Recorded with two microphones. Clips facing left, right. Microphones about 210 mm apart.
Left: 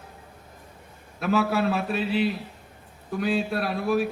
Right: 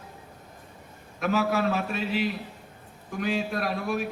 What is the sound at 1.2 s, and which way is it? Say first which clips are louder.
A man's voice: left 2 dB; 35° left (ahead or behind).